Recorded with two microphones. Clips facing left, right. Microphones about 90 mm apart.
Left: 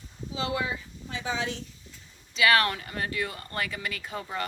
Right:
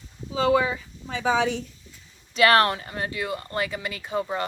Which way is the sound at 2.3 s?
45° right (ahead or behind).